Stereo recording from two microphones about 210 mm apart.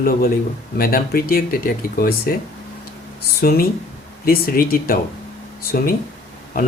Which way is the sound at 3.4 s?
45° left (ahead or behind).